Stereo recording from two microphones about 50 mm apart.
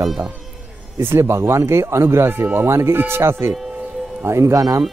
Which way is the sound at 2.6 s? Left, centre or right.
Right.